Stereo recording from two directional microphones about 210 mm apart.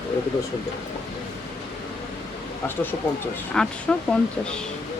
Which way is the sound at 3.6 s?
5° left (ahead or behind).